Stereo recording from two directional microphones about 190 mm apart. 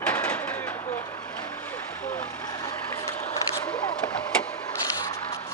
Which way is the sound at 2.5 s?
20° left (ahead or behind).